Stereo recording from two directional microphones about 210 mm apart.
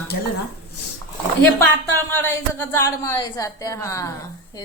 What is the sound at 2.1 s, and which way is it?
A woman's voice, 10° left (ahead or behind).